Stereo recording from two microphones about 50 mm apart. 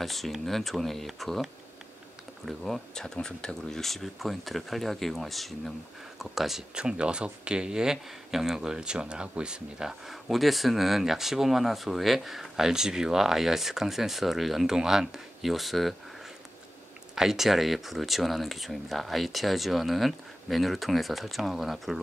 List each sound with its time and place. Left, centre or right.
0.0 s speech: centre
6.7 s speech: centre
17.1 s speech: centre